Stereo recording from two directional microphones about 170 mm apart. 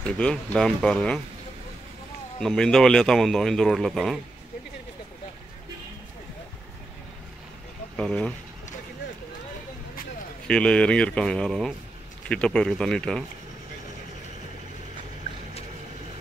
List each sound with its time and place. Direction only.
0.2 s a man's voice: 5° left (ahead or behind)
2.4 s a man's voice: 5° left (ahead or behind)
7.9 s speech: 5° left (ahead or behind)
10.4 s a man's voice: 5° left (ahead or behind)